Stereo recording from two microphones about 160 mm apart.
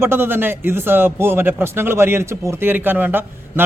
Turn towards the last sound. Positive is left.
turn(degrees=-10)  # may be behind; listen again after turning